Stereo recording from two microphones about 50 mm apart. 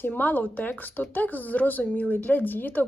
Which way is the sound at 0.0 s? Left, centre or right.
Left.